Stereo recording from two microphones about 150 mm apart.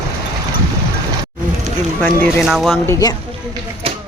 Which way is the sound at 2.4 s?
Centre (ahead or behind).